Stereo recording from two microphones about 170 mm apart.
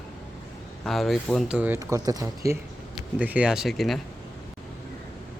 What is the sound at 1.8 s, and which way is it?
Speech, 20° right (ahead or behind).